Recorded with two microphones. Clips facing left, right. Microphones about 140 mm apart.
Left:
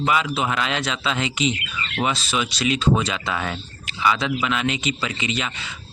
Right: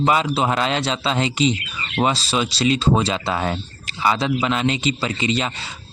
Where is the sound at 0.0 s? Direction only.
30° right (ahead or behind).